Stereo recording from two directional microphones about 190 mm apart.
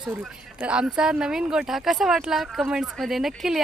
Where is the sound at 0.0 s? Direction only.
5° right (ahead or behind).